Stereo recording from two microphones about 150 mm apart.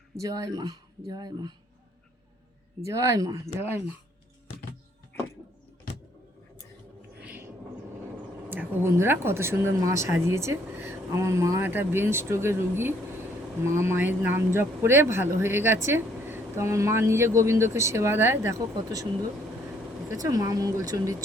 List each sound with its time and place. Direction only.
0.2 s speech: 20° right (ahead or behind)
2.8 s speech: 20° right (ahead or behind)
7.2 s a sound: 10° right (ahead or behind)
8.4 s speech: 15° right (ahead or behind)
20.1 s speech: 25° right (ahead or behind)